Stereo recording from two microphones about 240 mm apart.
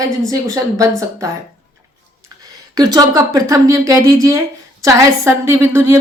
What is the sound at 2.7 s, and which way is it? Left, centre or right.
A woman's voice, centre.